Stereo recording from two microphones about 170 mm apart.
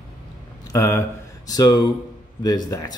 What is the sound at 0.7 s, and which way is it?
Speech, 15° left (ahead or behind).